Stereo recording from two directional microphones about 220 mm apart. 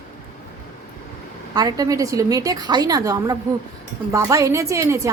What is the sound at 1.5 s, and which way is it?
A woman's voice, 15° right (ahead or behind).